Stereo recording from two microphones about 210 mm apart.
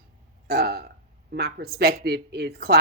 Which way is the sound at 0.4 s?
45° right (ahead or behind).